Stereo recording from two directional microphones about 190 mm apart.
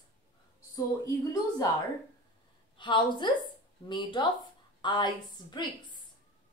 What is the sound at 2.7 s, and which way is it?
A woman's voice, 25° left (ahead or behind).